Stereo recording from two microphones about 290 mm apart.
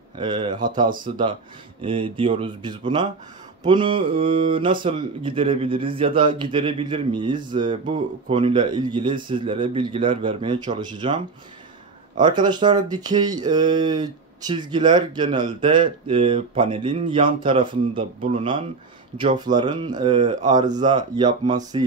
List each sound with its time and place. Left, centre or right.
0.1 s speech: centre
12.2 s speech: centre